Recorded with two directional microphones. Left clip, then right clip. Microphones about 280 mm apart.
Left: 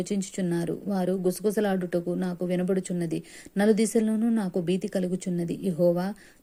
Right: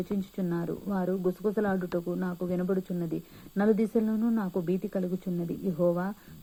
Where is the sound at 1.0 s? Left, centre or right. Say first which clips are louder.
Left 3 dB; left.